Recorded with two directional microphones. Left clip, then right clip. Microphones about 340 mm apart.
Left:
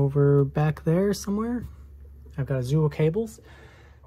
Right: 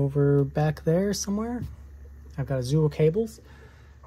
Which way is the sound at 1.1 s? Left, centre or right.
Centre.